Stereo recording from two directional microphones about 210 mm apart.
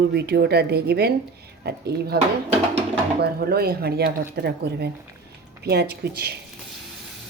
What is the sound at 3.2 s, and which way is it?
Speech, 50° right (ahead or behind).